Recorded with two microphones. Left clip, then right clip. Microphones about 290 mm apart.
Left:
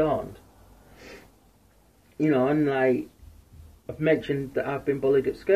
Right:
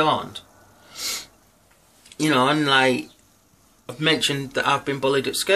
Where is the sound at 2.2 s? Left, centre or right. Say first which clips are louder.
Right 4 dB; centre.